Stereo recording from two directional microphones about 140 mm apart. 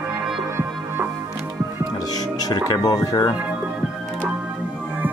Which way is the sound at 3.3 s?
10° right (ahead or behind).